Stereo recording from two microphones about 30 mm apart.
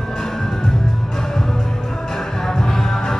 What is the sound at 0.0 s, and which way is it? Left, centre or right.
Music, centre.